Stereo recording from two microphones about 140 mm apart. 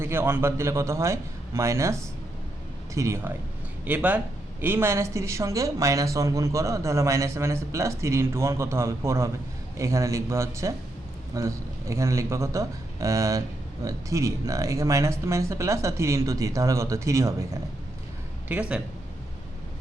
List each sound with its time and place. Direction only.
0.0 s speech: 15° right (ahead or behind)
18.4 s speech: 10° right (ahead or behind)